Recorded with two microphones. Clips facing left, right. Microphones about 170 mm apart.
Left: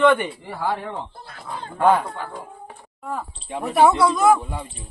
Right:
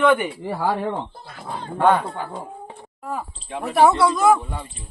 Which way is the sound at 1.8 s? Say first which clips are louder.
Even; centre (ahead or behind).